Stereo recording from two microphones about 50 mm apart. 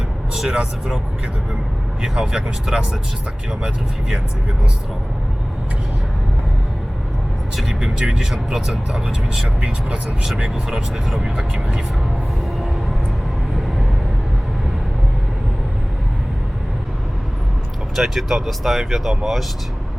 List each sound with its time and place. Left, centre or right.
0.5 s speech: right
2.0 s speech: centre
7.5 s speech: centre
11.2 s speech: centre
17.9 s speech: centre